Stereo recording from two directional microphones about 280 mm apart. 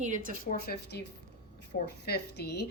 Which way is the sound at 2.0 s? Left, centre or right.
Left.